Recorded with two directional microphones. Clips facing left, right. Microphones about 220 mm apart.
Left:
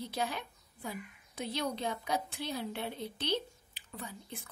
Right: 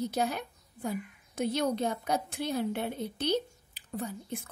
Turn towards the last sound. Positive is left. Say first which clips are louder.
# right 8 dB
turn(degrees=-50)  # may be behind; listen again after turning